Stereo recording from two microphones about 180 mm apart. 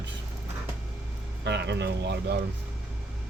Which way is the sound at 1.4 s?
70° right (ahead or behind).